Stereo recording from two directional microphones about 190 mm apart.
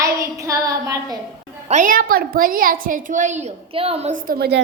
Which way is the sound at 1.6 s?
40° right (ahead or behind).